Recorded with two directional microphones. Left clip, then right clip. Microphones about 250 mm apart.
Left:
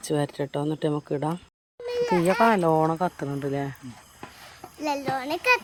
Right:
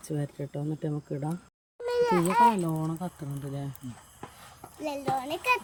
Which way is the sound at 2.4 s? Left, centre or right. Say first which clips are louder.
Left 6 dB; left.